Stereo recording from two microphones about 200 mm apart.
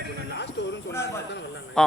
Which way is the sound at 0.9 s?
15° left (ahead or behind).